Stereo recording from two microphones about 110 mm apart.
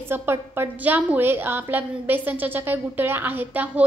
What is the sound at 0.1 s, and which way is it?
A woman's voice, 20° right (ahead or behind).